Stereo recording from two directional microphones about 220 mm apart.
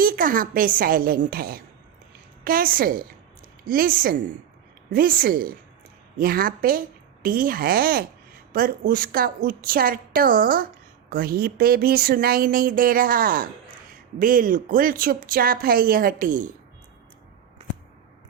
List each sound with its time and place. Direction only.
0.0 s speech: 40° right (ahead or behind)